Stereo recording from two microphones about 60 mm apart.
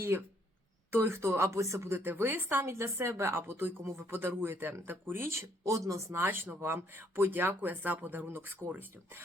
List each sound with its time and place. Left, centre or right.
0.1 s a woman's voice: right
1.4 s speech: right
2.0 s a woman's voice: right
5.6 s speech: right
6.1 s a woman's voice: right